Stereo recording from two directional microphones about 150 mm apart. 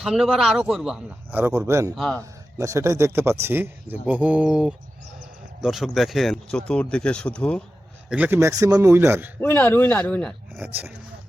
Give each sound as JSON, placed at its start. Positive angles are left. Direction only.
{"t": 0.0, "sound": "speech", "side_deg": 0}
{"t": 2.0, "sound": "speech", "side_deg": 5}
{"t": 2.6, "sound": "speech", "side_deg": -20}
{"t": 8.1, "sound": "speech", "side_deg": -10}
{"t": 9.4, "sound": "speech", "side_deg": 15}
{"t": 10.5, "sound": "speech", "side_deg": -15}